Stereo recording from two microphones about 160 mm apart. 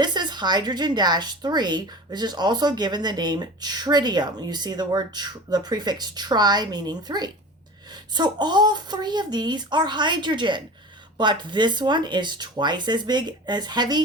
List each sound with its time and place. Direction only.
0.0 s speech: 25° right (ahead or behind)